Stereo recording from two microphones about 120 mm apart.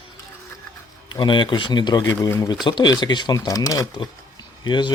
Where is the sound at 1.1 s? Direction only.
40° left (ahead or behind).